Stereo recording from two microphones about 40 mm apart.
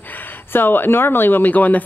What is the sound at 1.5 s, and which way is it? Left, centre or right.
Speech, left.